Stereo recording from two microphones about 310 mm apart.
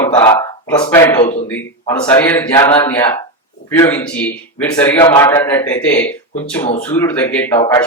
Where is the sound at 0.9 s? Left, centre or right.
Centre.